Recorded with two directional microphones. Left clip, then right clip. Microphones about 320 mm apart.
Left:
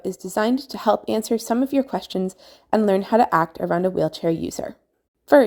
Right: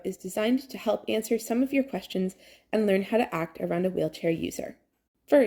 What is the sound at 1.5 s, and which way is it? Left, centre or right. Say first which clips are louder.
Speech: left 6 dB; left.